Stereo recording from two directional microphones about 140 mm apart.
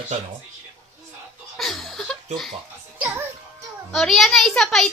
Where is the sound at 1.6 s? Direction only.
Centre (ahead or behind).